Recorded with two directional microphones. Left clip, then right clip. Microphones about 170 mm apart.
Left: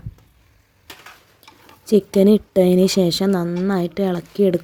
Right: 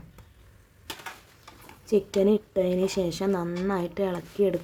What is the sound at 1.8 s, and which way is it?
A woman's voice, 35° left (ahead or behind).